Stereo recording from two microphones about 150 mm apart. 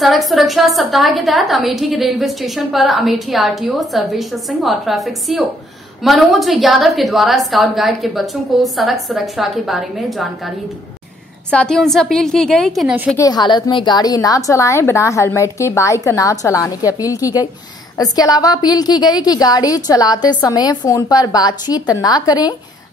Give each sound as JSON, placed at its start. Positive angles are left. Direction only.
{"t": 0.0, "sound": "a woman's voice", "side_deg": 0}
{"t": 11.5, "sound": "a woman's voice", "side_deg": 5}
{"t": 13.2, "sound": "a woman's voice", "side_deg": 30}